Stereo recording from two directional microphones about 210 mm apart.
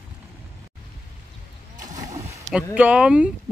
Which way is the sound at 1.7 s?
35° right (ahead or behind).